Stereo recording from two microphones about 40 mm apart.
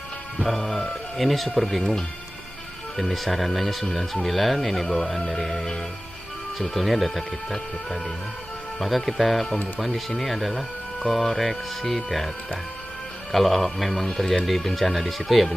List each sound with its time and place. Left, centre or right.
0.4 s speech: centre
1.8 s speech: centre
3.0 s speech: centre
13.3 s speech: centre